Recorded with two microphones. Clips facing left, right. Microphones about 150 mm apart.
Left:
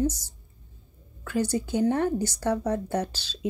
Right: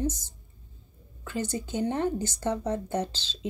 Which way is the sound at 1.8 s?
15° right (ahead or behind).